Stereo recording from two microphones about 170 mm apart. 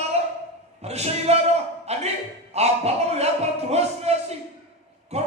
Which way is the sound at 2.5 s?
40° right (ahead or behind).